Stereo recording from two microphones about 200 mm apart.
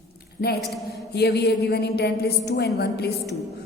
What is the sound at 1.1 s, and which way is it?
A woman's voice, 55° left (ahead or behind).